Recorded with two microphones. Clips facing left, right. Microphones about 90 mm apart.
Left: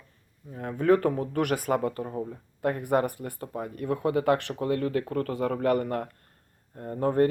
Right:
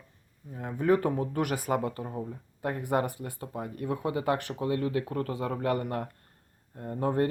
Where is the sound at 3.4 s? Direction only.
45° left (ahead or behind).